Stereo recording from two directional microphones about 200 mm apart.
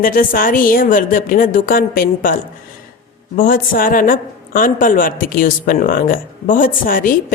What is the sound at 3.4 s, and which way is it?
A woman's voice, 45° left (ahead or behind).